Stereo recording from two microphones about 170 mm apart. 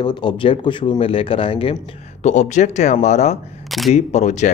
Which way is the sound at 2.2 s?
45° left (ahead or behind).